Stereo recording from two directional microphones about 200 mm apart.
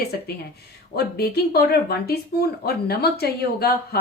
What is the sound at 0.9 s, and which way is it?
Speech, 50° left (ahead or behind).